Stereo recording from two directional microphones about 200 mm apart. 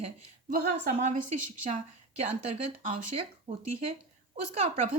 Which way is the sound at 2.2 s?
30° right (ahead or behind).